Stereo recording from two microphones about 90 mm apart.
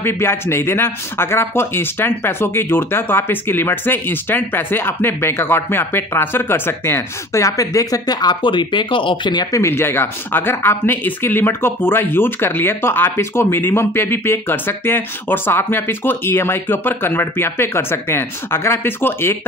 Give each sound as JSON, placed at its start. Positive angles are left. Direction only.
{"t": 0.0, "sound": "speech", "side_deg": 25}
{"t": 9.5, "sound": "speech", "side_deg": 30}